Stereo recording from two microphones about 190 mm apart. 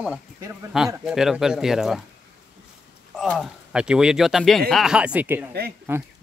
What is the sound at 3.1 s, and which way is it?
Speech, centre (ahead or behind).